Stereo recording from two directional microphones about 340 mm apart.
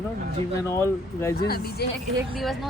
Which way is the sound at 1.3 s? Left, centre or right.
Left.